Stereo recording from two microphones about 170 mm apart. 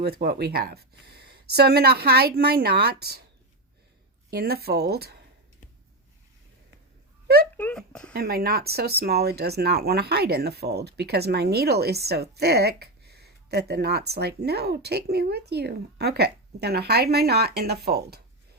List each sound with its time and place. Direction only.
0.0 s speech: 65° right (ahead or behind)
4.3 s speech: 65° right (ahead or behind)
7.5 s speech: 5° left (ahead or behind)
8.1 s speech: 65° right (ahead or behind)